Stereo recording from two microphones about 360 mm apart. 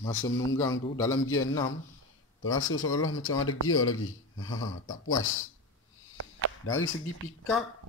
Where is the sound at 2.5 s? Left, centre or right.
Left.